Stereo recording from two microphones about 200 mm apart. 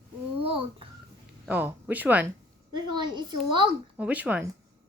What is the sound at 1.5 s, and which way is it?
Speech, 10° right (ahead or behind).